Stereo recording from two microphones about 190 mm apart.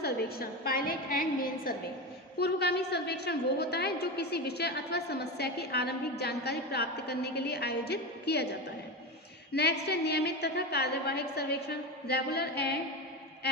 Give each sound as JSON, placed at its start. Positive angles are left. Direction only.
{"t": 0.0, "sound": "a woman's voice", "side_deg": 50}
{"t": 2.4, "sound": "a woman's voice", "side_deg": 60}
{"t": 9.5, "sound": "a woman's voice", "side_deg": 60}